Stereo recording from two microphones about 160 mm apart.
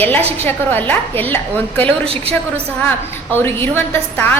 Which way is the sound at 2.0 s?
35° right (ahead or behind).